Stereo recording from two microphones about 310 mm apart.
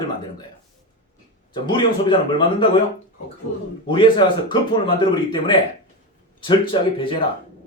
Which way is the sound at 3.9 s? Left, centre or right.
Centre.